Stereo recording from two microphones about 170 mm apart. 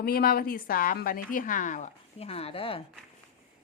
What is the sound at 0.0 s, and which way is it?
A woman's voice, 60° left (ahead or behind).